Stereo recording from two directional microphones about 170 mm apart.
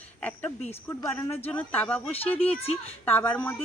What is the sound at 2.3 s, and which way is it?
Speech, 35° left (ahead or behind).